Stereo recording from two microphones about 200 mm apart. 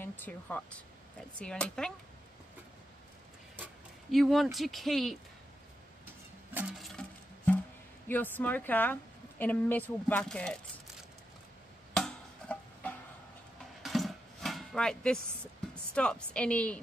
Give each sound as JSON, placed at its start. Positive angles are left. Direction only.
{"t": 0.0, "sound": "a woman's voice", "side_deg": 10}
{"t": 3.5, "sound": "speech", "side_deg": -5}
{"t": 6.5, "sound": "a sound", "side_deg": -5}
{"t": 7.0, "sound": "music", "side_deg": 5}
{"t": 8.1, "sound": "a woman's voice", "side_deg": 10}
{"t": 11.9, "sound": "music", "side_deg": 5}
{"t": 13.8, "sound": "a sound", "side_deg": 0}
{"t": 15.7, "sound": "speech", "side_deg": 5}